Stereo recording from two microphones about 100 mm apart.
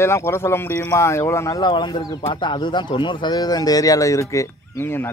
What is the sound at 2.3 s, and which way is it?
Speech, 50° left (ahead or behind).